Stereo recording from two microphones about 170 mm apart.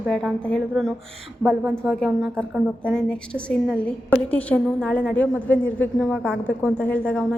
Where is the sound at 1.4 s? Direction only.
10° right (ahead or behind).